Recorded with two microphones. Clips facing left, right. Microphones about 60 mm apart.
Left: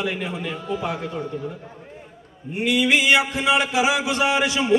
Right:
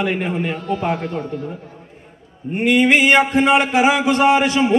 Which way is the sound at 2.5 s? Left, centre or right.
Right.